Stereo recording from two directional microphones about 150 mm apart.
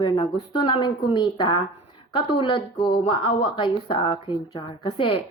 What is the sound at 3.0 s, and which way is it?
A woman's voice, 35° left (ahead or behind).